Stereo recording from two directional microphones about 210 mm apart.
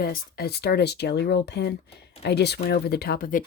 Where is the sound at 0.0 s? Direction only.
50° left (ahead or behind).